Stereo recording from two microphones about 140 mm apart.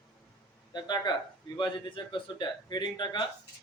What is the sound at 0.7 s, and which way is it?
Speech, 30° left (ahead or behind).